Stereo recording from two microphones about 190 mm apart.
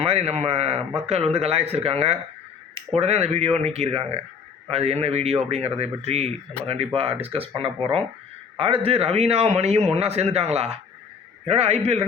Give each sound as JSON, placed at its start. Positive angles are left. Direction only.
{"t": 0.0, "sound": "a man's voice", "side_deg": -30}